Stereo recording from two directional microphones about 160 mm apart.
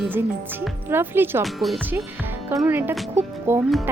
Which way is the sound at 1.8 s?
10° right (ahead or behind).